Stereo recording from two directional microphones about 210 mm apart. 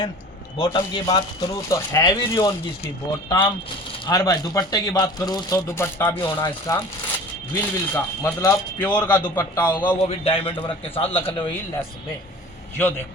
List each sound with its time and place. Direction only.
0.5 s speech: 20° left (ahead or behind)
9.8 s speech: 25° left (ahead or behind)